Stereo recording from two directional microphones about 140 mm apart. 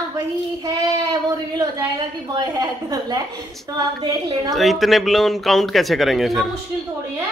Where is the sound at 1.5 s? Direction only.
30° right (ahead or behind).